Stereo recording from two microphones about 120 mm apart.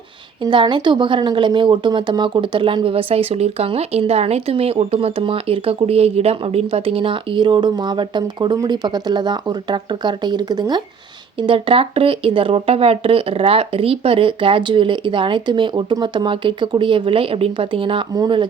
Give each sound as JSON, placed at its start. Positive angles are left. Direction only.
{"t": 0.4, "sound": "speech", "side_deg": -40}